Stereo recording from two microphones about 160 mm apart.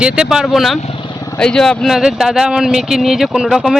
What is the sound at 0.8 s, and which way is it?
Speech, 40° left (ahead or behind).